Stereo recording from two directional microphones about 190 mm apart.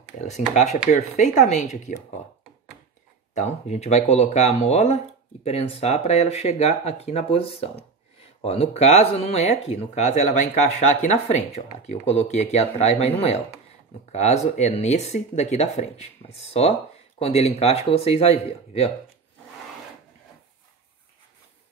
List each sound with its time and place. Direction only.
0.2 s speech: 40° left (ahead or behind)
3.3 s speech: 35° left (ahead or behind)